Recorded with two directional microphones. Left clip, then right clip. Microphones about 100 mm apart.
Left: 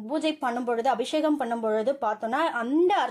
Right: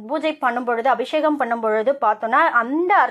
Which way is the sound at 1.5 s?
5° left (ahead or behind).